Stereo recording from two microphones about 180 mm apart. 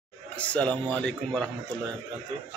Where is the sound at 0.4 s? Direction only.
5° left (ahead or behind).